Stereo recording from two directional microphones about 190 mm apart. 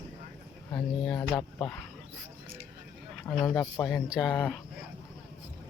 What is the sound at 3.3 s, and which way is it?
Speech, 5° left (ahead or behind).